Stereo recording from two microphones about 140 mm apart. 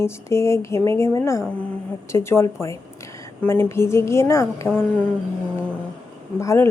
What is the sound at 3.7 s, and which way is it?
Speech, 20° left (ahead or behind).